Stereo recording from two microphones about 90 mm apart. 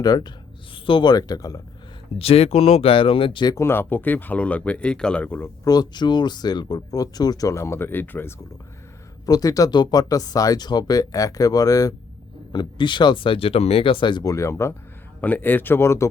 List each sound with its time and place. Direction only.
0.0 s speech: 50° left (ahead or behind)
2.1 s speech: 90° left
3.6 s speech: 25° left (ahead or behind)
5.6 s speech: 50° left (ahead or behind); by 8.3 s 20° left (ahead or behind)
9.2 s speech: 45° left (ahead or behind)
12.5 s speech: 60° left (ahead or behind)
14.3 s speech: 35° left (ahead or behind)
15.2 s speech: 20° left (ahead or behind)